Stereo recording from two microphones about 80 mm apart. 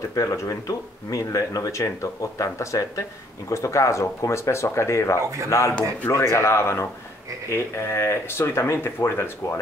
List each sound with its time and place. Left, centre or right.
0.1 s speech: left